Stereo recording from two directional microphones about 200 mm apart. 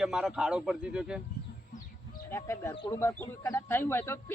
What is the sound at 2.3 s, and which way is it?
Speech, 15° left (ahead or behind).